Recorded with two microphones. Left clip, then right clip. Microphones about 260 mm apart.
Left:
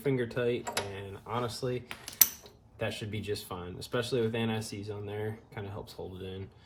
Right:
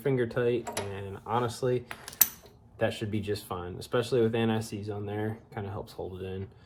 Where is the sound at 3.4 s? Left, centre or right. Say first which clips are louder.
Right 4 dB; right.